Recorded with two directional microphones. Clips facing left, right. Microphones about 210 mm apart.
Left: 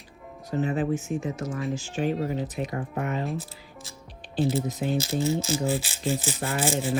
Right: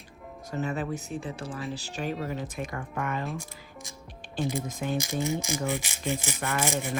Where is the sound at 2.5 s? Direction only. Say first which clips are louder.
Left 4 dB; 50° right (ahead or behind).